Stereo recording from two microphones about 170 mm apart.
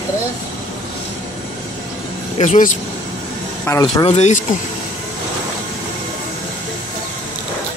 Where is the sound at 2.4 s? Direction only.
50° left (ahead or behind).